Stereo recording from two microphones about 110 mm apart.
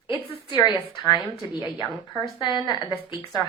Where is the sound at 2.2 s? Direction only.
45° left (ahead or behind).